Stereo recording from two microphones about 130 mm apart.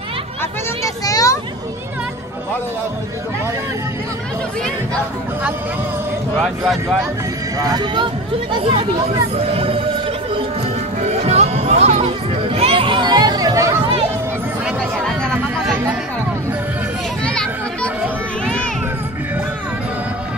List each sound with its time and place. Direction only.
0.4 s a sound: 25° left (ahead or behind)
6.4 s speech: centre (ahead or behind)
7.5 s speech: 30° right (ahead or behind)
11.0 s music: 55° right (ahead or behind)
12.0 s chatter: 45° right (ahead or behind); by 13.7 s 25° right (ahead or behind)
14.7 s chatter: centre (ahead or behind)
15.6 s music: 10° right (ahead or behind)
17.2 s children playing: 5° left (ahead or behind)
18.4 s a sound: 5° left (ahead or behind)